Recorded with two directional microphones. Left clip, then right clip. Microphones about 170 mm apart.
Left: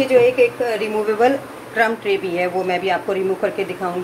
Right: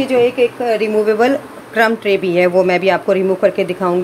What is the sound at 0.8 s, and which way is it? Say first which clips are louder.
Speech: right 3 dB; 60° right (ahead or behind).